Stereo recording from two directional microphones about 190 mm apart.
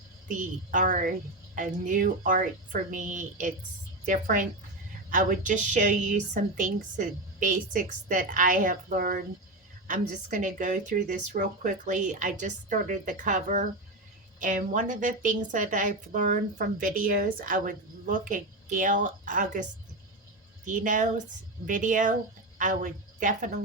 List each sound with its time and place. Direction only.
0.3 s a woman's voice: 45° right (ahead or behind)
20.7 s a woman's voice: 45° right (ahead or behind)